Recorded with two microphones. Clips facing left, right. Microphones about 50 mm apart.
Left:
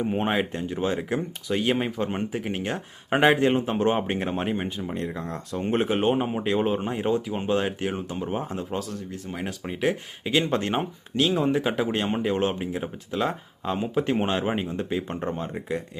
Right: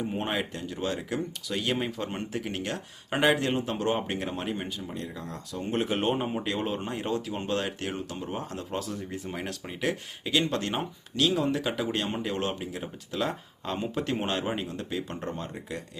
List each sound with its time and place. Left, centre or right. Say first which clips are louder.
0.0 s speech: left 5 dB; left
4.9 s speech: left 6 dB; left
6.0 s speech: left 4 dB; centre
8.7 s speech: left 2 dB; centre; by 15.8 s left